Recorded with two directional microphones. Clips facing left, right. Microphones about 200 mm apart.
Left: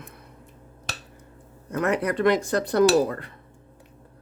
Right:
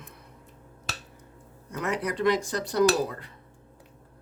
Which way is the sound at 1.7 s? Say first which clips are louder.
Left 6 dB; 55° left (ahead or behind).